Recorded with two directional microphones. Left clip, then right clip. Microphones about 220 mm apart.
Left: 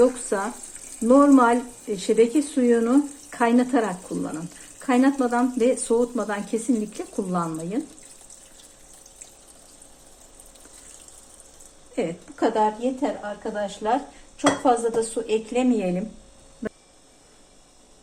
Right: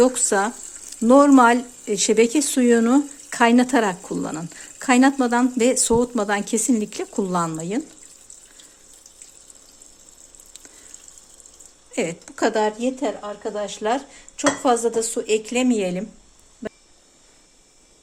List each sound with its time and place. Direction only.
0.0 s speech: 50° right (ahead or behind)
11.9 s speech: 50° right (ahead or behind)